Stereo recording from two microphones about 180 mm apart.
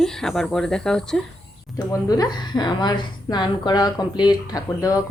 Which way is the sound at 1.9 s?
20° left (ahead or behind).